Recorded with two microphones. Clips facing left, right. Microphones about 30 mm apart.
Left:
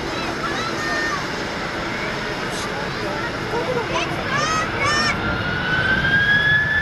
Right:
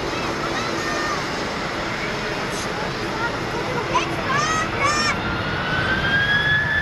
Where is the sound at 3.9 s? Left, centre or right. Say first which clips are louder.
Right 1 dB; left.